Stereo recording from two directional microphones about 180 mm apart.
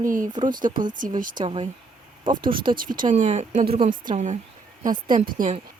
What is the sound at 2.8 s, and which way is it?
Speech, 50° right (ahead or behind).